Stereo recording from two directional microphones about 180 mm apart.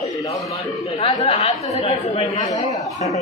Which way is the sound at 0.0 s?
20° left (ahead or behind).